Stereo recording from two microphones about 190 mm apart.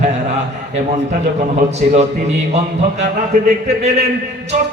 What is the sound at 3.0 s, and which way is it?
Speech, 35° right (ahead or behind).